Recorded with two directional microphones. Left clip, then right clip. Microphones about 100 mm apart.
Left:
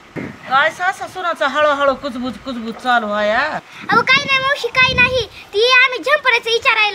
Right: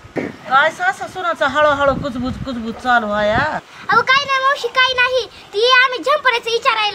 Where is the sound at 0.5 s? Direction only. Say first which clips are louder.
Right 1 dB; centre (ahead or behind).